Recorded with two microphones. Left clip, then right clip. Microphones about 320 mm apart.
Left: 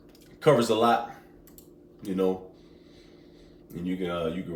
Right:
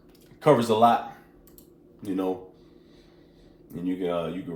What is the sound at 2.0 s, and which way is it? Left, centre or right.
Speech, centre.